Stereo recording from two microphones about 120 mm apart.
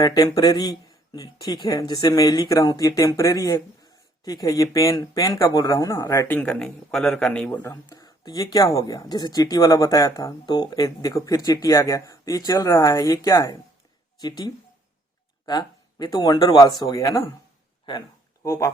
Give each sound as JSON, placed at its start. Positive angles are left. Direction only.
{"t": 0.0, "sound": "speech", "side_deg": 30}
{"t": 6.2, "sound": "speech", "side_deg": 10}
{"t": 7.6, "sound": "speech", "side_deg": 20}
{"t": 7.9, "sound": "speech", "side_deg": 35}
{"t": 18.4, "sound": "speech", "side_deg": 25}